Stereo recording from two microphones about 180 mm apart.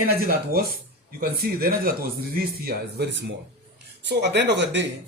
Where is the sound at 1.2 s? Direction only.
55° right (ahead or behind).